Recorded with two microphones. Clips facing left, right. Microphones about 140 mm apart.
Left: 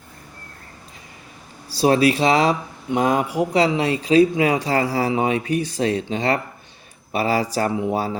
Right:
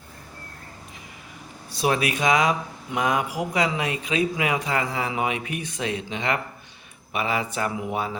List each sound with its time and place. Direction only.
1.7 s speech: 30° left (ahead or behind)